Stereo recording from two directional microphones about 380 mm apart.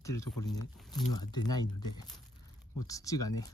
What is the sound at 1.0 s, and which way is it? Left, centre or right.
Speech, left.